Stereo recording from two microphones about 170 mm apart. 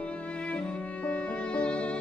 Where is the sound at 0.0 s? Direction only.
5° left (ahead or behind).